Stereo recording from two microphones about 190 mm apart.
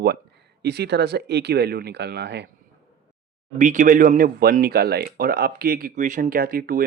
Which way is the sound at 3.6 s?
40° right (ahead or behind).